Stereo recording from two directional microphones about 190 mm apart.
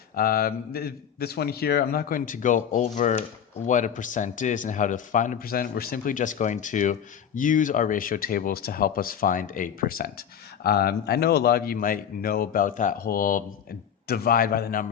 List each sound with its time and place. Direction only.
0.2 s a man's voice: 50° left (ahead or behind)